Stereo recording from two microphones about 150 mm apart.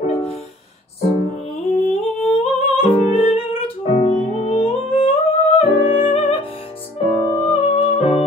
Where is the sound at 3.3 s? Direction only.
40° left (ahead or behind).